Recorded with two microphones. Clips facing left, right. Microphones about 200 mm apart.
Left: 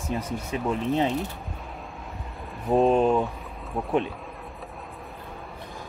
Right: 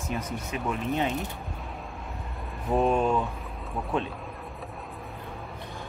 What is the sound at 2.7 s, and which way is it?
Speech, 35° left (ahead or behind).